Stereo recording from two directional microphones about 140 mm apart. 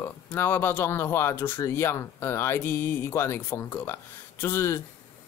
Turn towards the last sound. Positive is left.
turn(degrees=20)  # may be behind; listen again after turning